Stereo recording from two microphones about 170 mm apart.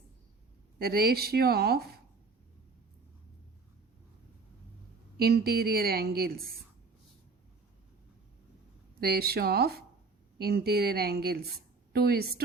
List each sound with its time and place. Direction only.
0.8 s a woman's voice: 65° right (ahead or behind)
5.1 s a woman's voice: 65° right (ahead or behind)
9.0 s a woman's voice: 65° right (ahead or behind)